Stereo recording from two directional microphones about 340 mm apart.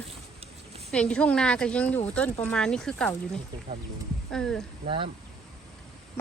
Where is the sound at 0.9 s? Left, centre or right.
Centre.